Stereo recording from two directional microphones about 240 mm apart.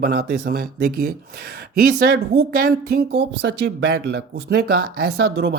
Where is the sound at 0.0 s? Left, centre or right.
Right.